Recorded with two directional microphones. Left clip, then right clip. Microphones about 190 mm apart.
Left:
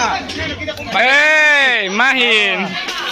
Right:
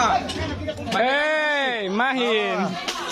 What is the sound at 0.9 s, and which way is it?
Speech, 10° right (ahead or behind).